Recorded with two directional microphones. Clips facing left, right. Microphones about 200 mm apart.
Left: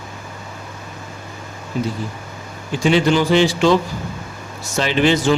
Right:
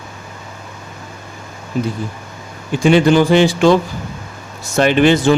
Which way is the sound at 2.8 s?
50° right (ahead or behind).